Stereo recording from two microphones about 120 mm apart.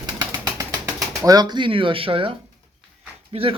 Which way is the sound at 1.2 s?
35° right (ahead or behind).